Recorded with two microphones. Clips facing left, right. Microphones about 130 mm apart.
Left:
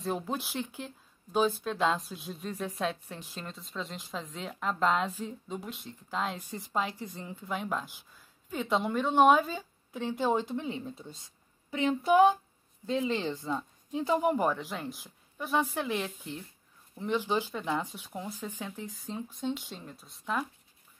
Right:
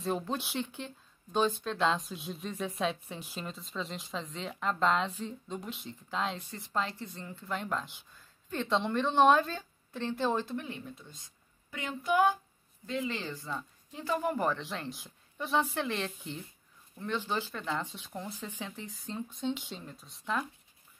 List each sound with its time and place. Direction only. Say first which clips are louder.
0.0 s speech: even; centre (ahead or behind); by 10.8 s 20° left (ahead or behind)
11.0 s speech: left 6 dB; 30° left (ahead or behind)
11.7 s a sound: left 10 dB; 25° left (ahead or behind)
12.8 s speech: left 5 dB; 25° left (ahead or behind); by 16.4 s 5° left (ahead or behind)
16.9 s speech: left 4 dB; 15° left (ahead or behind)